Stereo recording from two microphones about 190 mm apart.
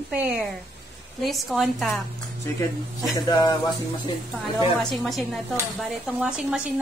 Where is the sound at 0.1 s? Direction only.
5° right (ahead or behind).